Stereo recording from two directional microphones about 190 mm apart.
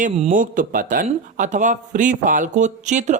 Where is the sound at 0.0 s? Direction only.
45° right (ahead or behind).